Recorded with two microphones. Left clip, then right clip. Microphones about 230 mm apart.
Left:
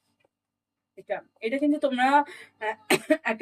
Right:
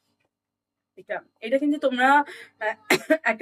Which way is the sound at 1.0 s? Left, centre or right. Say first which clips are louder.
Right 2 dB; centre.